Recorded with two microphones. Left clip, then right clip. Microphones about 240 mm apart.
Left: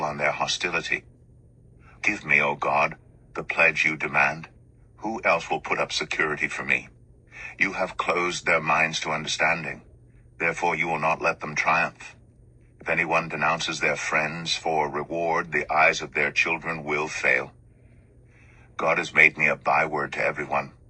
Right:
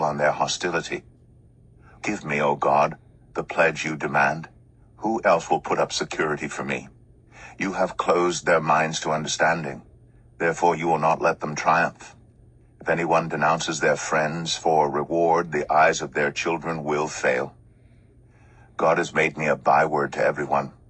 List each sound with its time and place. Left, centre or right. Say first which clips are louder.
0.0 s speech: right 4 dB; right
18.8 s speech: left 1 dB; right